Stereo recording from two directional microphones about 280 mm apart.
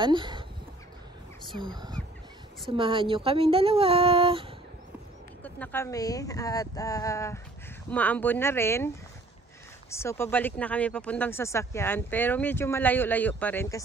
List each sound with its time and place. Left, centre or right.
0.0 s speech: centre
1.5 s speech: centre
5.4 s speech: centre